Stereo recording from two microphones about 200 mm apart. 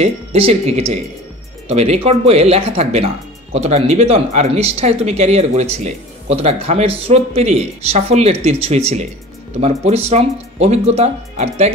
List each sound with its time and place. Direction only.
0.0 s speech: 30° right (ahead or behind)